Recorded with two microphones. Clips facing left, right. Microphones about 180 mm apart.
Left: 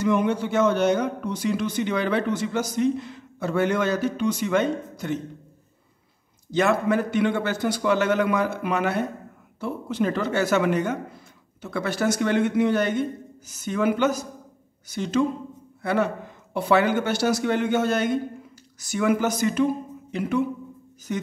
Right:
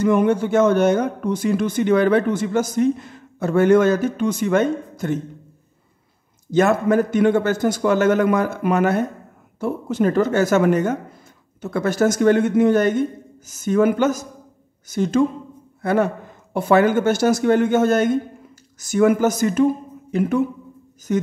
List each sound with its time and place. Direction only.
0.0 s speech: 50° right (ahead or behind)
6.5 s a man's voice: 45° right (ahead or behind)